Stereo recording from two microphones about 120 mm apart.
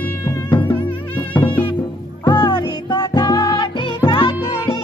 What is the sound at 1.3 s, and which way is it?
Music, 15° left (ahead or behind).